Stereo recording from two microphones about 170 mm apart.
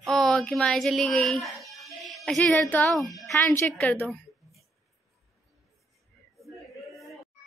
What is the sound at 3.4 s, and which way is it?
A woman's voice, 10° left (ahead or behind).